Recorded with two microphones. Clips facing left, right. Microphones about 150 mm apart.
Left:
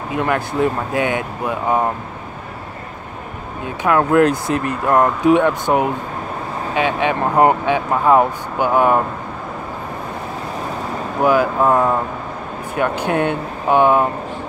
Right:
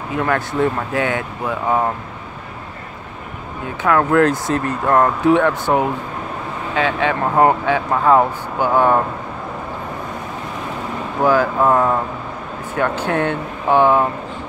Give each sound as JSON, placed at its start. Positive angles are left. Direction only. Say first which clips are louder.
{"t": 0.2, "sound": "speech", "louder": "even", "side_deg": 15}
{"t": 3.8, "sound": "speech", "louder": "left 1 dB", "side_deg": 20}
{"t": 11.2, "sound": "speech", "louder": "even", "side_deg": 15}